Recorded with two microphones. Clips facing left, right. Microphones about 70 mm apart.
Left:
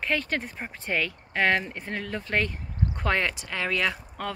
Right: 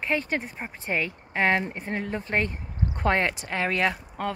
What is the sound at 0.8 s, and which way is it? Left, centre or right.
Speech, right.